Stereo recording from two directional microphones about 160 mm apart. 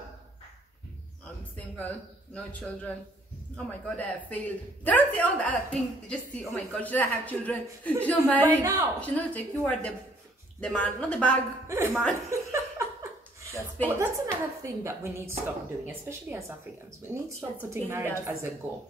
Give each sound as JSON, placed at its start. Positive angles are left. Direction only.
{"t": 1.8, "sound": "speech", "side_deg": 10}
{"t": 11.6, "sound": "a sound", "side_deg": -15}
{"t": 11.9, "sound": "speech", "side_deg": 0}
{"t": 12.3, "sound": "laughter", "side_deg": -20}
{"t": 13.8, "sound": "a woman's voice", "side_deg": -20}